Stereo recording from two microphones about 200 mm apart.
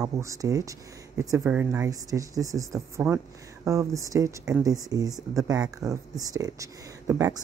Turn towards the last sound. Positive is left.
turn(degrees=-15)  # may be behind; listen again after turning